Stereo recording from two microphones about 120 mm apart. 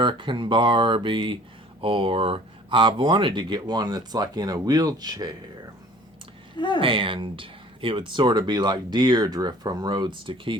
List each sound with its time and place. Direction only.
0.0 s speech: 40° right (ahead or behind)
6.7 s speech: 45° right (ahead or behind)